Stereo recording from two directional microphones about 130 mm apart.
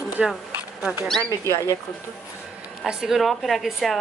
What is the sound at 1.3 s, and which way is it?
Speech, 25° left (ahead or behind).